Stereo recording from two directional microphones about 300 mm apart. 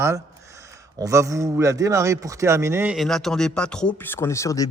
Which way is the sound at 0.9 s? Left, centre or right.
Centre.